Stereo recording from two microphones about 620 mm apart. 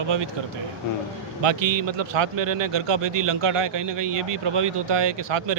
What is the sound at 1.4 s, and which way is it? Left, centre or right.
A man's voice, right.